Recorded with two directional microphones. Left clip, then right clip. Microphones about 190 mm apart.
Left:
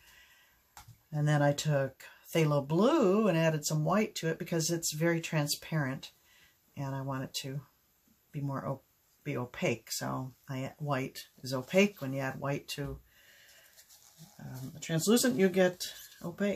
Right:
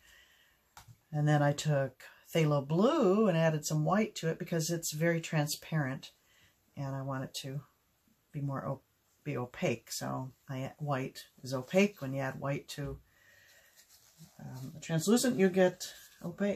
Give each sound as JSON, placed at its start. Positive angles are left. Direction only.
{"t": 1.1, "sound": "speech", "side_deg": 15}
{"t": 14.5, "sound": "speech", "side_deg": 20}